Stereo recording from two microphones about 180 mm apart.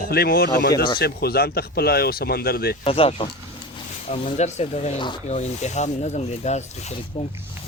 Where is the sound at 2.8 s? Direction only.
30° left (ahead or behind).